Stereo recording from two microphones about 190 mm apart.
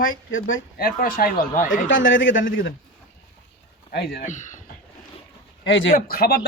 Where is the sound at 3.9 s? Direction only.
55° left (ahead or behind).